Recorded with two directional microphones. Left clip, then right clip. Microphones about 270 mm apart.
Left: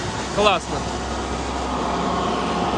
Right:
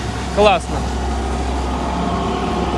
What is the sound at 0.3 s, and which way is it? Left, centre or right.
Speech, centre.